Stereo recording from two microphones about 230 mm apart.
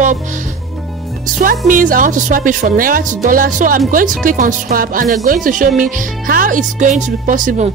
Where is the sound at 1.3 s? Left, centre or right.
Right.